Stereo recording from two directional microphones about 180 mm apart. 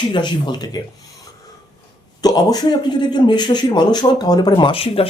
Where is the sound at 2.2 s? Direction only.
20° left (ahead or behind).